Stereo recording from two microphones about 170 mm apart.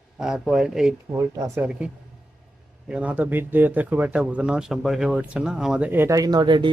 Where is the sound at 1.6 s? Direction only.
5° right (ahead or behind).